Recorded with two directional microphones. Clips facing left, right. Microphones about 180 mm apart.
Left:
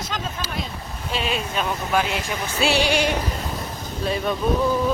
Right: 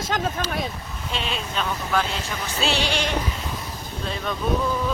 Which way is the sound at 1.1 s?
5° left (ahead or behind).